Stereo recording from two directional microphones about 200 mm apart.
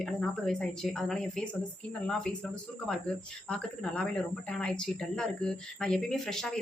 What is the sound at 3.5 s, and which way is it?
Speech, 5° left (ahead or behind).